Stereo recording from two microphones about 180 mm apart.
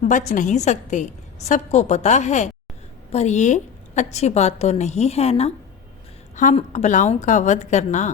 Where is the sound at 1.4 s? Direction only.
40° left (ahead or behind).